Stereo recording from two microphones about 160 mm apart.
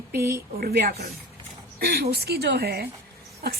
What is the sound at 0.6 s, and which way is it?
A woman's voice, 75° right (ahead or behind).